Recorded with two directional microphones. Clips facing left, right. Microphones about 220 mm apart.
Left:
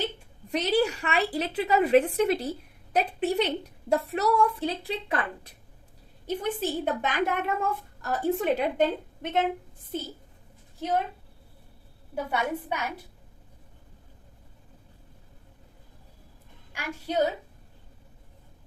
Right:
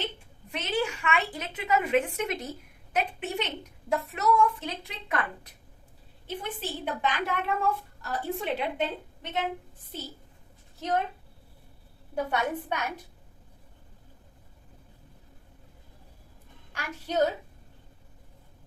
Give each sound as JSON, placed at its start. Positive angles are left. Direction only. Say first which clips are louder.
{"t": 0.5, "sound": "a woman's voice", "louder": "left 6 dB", "side_deg": 35}
{"t": 6.2, "sound": "a woman's voice", "louder": "left 7 dB", "side_deg": 45}
{"t": 10.8, "sound": "a woman's voice", "louder": "left 1 dB", "side_deg": 10}
{"t": 12.1, "sound": "a woman's voice", "louder": "even", "side_deg": 5}
{"t": 16.7, "sound": "a woman's voice", "louder": "left 3 dB", "side_deg": 10}